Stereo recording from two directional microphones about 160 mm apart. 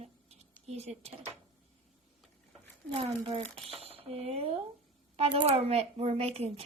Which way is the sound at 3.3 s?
35° right (ahead or behind).